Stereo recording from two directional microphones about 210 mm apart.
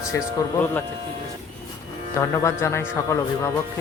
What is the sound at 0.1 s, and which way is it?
Speech, 10° left (ahead or behind).